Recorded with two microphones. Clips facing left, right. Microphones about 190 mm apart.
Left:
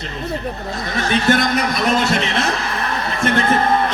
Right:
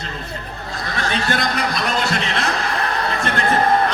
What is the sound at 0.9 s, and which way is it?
Speech, 20° left (ahead or behind).